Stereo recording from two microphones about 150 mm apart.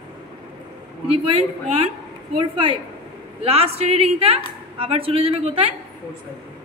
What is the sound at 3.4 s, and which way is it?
A woman's voice, 40° right (ahead or behind).